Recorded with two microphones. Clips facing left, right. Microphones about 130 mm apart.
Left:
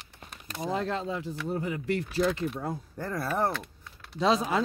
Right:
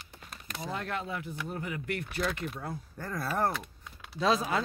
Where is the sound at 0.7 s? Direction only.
25° left (ahead or behind).